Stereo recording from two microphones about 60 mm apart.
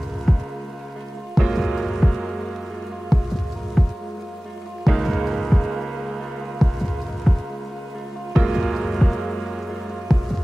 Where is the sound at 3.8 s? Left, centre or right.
Centre.